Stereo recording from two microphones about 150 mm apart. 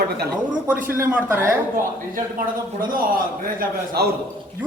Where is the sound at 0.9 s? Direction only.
15° right (ahead or behind).